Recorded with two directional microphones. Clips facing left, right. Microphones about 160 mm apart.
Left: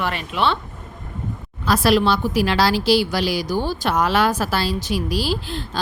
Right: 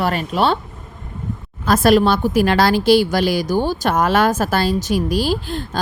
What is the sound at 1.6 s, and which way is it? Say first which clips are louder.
Speech: right 4 dB; 50° right (ahead or behind).